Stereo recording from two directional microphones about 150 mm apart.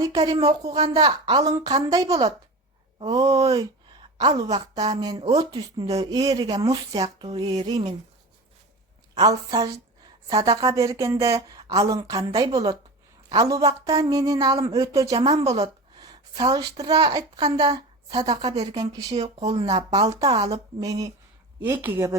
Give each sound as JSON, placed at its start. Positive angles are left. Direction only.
{"t": 0.0, "sound": "speech", "side_deg": -25}
{"t": 4.0, "sound": "a sound", "side_deg": -30}
{"t": 4.9, "sound": "speech", "side_deg": -25}
{"t": 9.1, "sound": "speech", "side_deg": -25}
{"t": 15.2, "sound": "a woman's voice", "side_deg": -45}
{"t": 15.6, "sound": "a woman's voice", "side_deg": -25}
{"t": 19.1, "sound": "speech", "side_deg": -45}
{"t": 21.6, "sound": "speech", "side_deg": -15}